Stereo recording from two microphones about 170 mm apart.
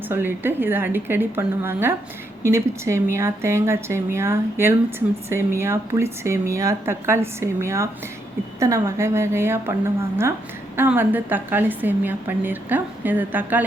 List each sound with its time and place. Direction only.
0.1 s speech: 10° right (ahead or behind)
10.8 s speech: 10° right (ahead or behind)